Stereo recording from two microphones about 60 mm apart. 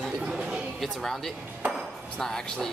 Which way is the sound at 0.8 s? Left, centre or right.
Centre.